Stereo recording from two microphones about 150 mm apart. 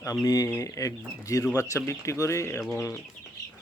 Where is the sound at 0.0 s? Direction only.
25° left (ahead or behind).